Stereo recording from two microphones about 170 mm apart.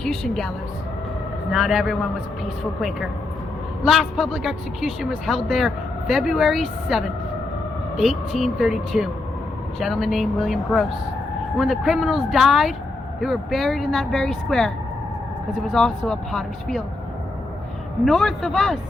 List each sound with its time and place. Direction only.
0.0 s a woman's voice: centre (ahead or behind)
1.5 s speech: centre (ahead or behind)
3.8 s speech: centre (ahead or behind)
15.7 s speech: 5° left (ahead or behind)
18.0 s speech: centre (ahead or behind)